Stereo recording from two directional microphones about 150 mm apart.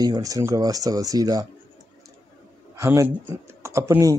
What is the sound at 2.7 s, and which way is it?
Speech, 20° right (ahead or behind).